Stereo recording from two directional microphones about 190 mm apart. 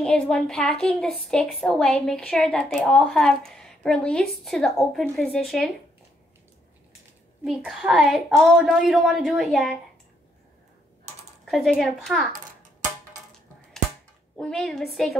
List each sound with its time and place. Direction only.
0.0 s a woman's voice: 5° left (ahead or behind)
7.4 s a woman's voice: centre (ahead or behind)
11.4 s a woman's voice: centre (ahead or behind)
14.3 s a woman's voice: centre (ahead or behind)